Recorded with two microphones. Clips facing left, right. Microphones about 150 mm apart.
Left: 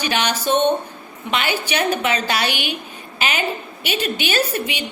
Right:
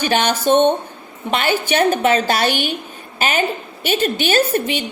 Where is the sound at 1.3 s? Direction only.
45° right (ahead or behind).